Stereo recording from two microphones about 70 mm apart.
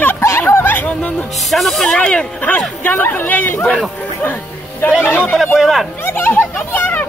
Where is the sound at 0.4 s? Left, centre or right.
Left.